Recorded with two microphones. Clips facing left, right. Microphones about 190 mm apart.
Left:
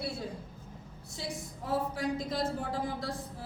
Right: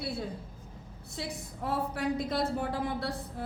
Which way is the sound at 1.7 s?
65° right (ahead or behind).